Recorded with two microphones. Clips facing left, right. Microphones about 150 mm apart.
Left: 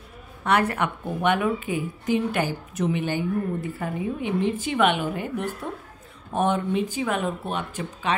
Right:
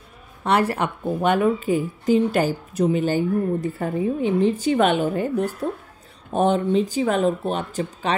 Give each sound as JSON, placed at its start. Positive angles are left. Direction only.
{"t": 0.4, "sound": "a woman's voice", "side_deg": -30}